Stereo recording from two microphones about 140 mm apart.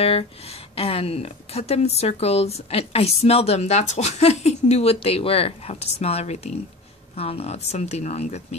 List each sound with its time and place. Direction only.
0.0 s speech: 45° left (ahead or behind)